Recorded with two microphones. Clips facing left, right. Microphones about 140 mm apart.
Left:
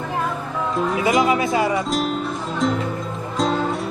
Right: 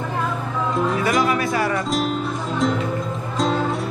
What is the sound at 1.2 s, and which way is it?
Speech, 20° left (ahead or behind).